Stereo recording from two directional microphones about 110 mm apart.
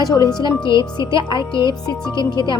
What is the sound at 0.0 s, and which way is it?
Speech, 35° left (ahead or behind).